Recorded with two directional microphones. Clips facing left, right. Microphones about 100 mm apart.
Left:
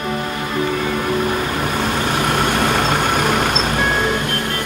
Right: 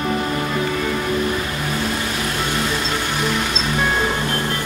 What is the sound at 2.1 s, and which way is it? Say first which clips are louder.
Vehicle: left 6 dB; 60° left (ahead or behind).